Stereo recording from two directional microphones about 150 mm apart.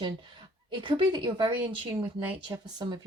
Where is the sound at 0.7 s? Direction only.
35° right (ahead or behind).